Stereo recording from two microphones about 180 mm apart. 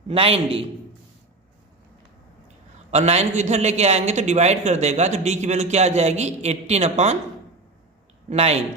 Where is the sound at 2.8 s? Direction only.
35° right (ahead or behind).